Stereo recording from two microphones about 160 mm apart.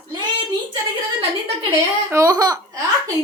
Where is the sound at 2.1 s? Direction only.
20° right (ahead or behind).